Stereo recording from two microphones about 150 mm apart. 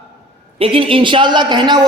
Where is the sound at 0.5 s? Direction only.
40° right (ahead or behind).